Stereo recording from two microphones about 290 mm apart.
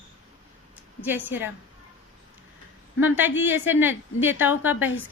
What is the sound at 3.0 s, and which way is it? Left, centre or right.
A woman's voice, centre.